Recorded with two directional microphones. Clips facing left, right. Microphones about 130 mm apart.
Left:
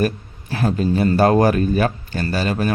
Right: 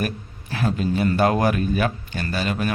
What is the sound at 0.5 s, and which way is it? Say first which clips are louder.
Speech: left 4 dB; 40° left (ahead or behind).